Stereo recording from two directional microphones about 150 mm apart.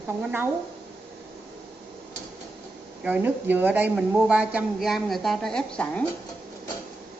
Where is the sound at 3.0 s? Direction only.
10° right (ahead or behind); by 6.0 s 5° left (ahead or behind).